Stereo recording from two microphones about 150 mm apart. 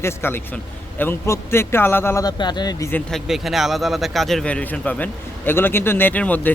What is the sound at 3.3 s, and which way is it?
Speech, centre (ahead or behind).